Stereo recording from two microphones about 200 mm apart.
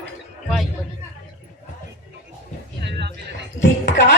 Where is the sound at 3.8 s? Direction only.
60° left (ahead or behind).